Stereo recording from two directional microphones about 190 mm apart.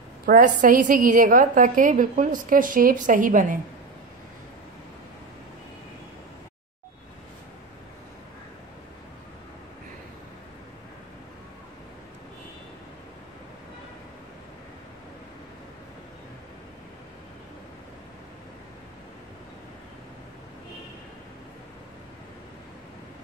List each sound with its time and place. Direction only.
0.3 s a woman's voice: 45° right (ahead or behind)